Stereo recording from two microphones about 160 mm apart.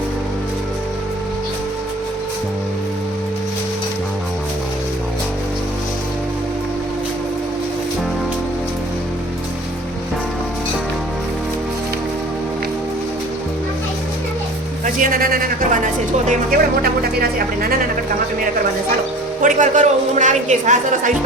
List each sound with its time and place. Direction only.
14.8 s speech: 60° right (ahead or behind)
19.4 s a woman's voice: 55° right (ahead or behind)